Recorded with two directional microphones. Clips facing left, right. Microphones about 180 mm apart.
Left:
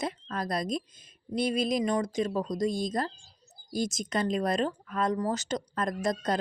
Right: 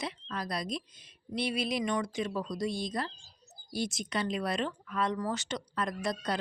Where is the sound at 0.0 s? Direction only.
45° left (ahead or behind).